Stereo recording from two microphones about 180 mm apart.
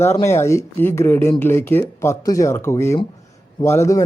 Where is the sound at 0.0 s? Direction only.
15° left (ahead or behind).